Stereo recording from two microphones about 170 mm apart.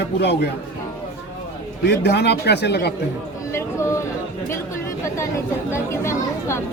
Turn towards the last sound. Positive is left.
turn(degrees=15)  # may be behind; listen again after turning